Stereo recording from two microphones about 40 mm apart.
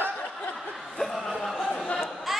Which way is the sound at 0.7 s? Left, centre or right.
Centre.